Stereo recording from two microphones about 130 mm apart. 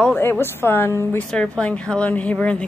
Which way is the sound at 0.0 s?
15° left (ahead or behind).